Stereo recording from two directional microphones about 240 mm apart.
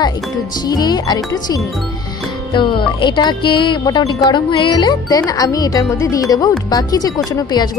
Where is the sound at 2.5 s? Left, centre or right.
Centre.